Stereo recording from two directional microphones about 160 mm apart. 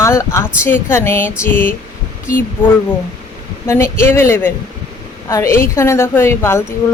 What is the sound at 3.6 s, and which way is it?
Speech, 15° left (ahead or behind).